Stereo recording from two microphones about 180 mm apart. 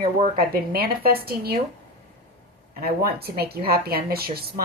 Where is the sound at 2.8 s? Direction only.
60° right (ahead or behind).